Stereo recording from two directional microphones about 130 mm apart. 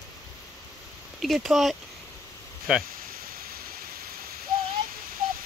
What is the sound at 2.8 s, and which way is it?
Owl, 90° right.